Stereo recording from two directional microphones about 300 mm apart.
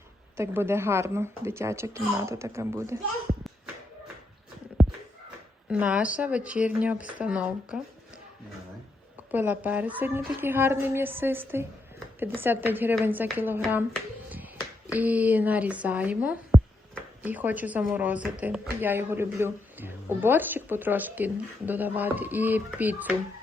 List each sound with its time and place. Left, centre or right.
0.3 s a woman's voice: centre
4.8 s a sound: centre
5.6 s speech: centre
9.3 s a woman's voice: centre
14.3 s finger snapping: centre
14.9 s speech: centre